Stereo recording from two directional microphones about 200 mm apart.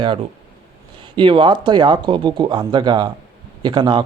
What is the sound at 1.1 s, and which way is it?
Speech, 25° right (ahead or behind).